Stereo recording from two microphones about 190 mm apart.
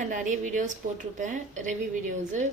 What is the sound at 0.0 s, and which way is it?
A woman's voice, 40° right (ahead or behind).